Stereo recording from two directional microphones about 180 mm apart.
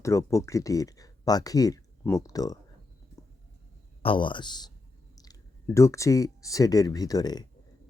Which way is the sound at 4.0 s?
30° left (ahead or behind).